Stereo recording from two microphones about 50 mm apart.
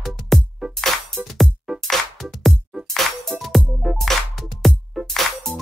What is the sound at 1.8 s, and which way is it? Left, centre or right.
Music, centre.